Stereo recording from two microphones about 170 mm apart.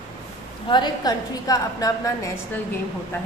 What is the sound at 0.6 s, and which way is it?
A woman's voice, 25° left (ahead or behind).